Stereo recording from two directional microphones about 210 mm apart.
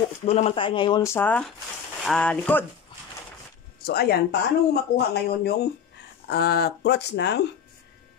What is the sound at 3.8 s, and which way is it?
Speech, 50° left (ahead or behind).